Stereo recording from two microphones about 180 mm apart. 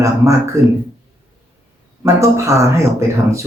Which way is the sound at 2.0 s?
15° right (ahead or behind).